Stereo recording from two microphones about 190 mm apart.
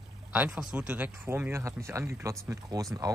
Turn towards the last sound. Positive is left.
turn(degrees=-15)  # may be behind; listen again after turning